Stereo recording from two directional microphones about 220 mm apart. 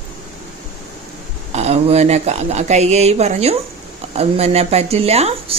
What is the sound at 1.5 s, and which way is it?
A woman's voice, 30° right (ahead or behind).